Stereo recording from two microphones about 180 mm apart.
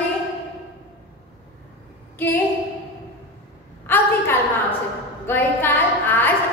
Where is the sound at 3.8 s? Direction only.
10° left (ahead or behind).